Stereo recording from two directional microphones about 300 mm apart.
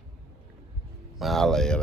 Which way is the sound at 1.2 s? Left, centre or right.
Centre.